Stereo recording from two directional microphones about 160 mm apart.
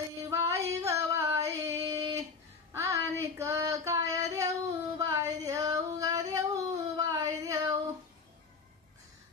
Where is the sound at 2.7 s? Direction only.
15° right (ahead or behind).